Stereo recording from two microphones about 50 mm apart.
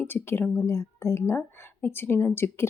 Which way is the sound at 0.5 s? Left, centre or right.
Left.